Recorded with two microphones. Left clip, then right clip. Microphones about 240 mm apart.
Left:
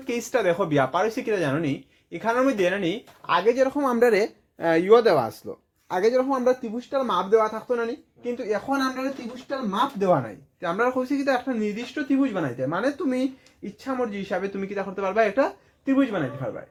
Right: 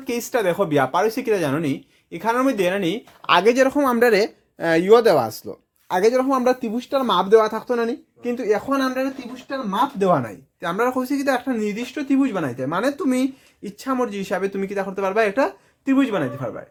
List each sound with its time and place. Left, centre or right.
0.0 s speech: right
3.8 s speech: right
10.6 s speech: right
15.9 s speech: right